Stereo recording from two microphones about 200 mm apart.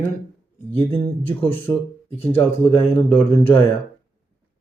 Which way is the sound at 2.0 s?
30° left (ahead or behind).